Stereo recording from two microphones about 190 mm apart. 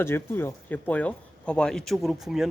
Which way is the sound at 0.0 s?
10° left (ahead or behind).